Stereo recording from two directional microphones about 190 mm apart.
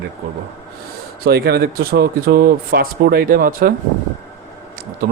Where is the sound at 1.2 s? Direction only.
55° right (ahead or behind).